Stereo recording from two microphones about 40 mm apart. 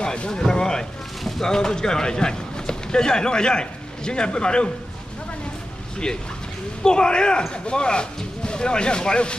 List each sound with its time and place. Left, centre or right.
0.0 s a sound: left
1.4 s a man's voice: centre
6.8 s a man's voice: left